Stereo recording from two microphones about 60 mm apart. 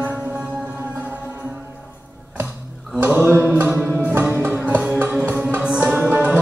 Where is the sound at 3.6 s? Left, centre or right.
Right.